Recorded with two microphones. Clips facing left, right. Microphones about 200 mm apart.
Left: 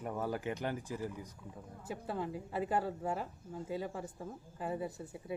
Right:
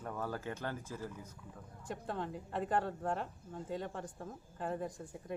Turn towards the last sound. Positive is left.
turn(degrees=5)  # may be behind; listen again after turning